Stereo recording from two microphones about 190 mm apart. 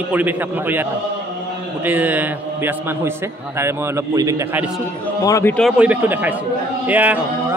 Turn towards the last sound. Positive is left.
turn(degrees=-10)  # may be behind; listen again after turning